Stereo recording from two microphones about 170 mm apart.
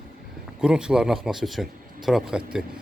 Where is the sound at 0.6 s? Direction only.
5° right (ahead or behind).